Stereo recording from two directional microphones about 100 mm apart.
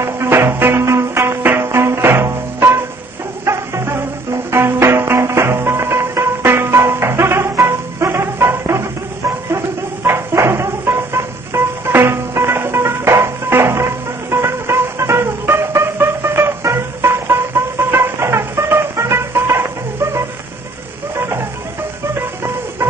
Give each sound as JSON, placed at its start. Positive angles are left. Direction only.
{"t": 0.0, "sound": "music", "side_deg": -25}
{"t": 10.0, "sound": "music", "side_deg": -25}